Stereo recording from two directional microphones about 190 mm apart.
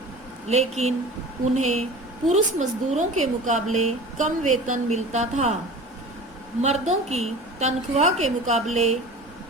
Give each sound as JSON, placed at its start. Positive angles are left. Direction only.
{"t": 0.4, "sound": "a woman's voice", "side_deg": -35}
{"t": 6.6, "sound": "a woman's voice", "side_deg": -35}